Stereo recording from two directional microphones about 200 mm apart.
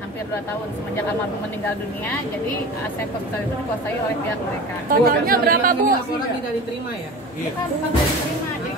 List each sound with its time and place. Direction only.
5.0 s speech: 45° right (ahead or behind)